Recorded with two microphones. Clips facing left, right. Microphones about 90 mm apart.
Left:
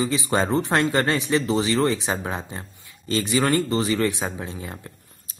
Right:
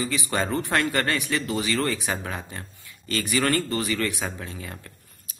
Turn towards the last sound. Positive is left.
turn(degrees=25)  # may be behind; listen again after turning